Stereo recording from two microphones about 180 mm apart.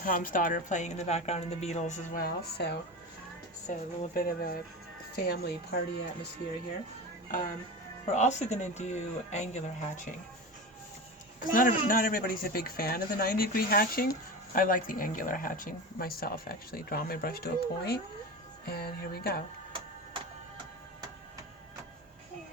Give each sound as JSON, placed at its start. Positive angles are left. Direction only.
{"t": 0.0, "sound": "a woman's voice", "side_deg": 50}
{"t": 2.2, "sound": "speech", "side_deg": 65}
{"t": 3.7, "sound": "speech", "side_deg": 50}
{"t": 8.0, "sound": "a woman's voice", "side_deg": 40}
{"t": 11.3, "sound": "speech", "side_deg": 50}